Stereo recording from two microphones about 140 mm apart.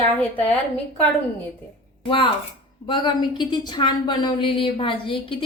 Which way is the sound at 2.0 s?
35° left (ahead or behind).